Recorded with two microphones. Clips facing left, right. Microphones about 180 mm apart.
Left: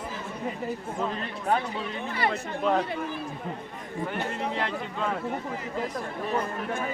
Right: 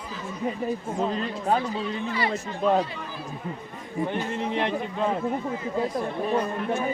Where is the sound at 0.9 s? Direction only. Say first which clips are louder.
Right 4 dB; 20° right (ahead or behind).